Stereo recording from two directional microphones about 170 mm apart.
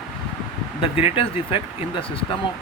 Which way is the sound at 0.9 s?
35° left (ahead or behind).